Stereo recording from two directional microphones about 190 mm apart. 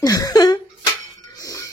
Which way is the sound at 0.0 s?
20° left (ahead or behind).